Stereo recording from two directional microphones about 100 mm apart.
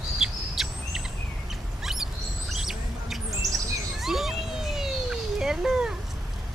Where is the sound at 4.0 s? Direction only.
Centre (ahead or behind).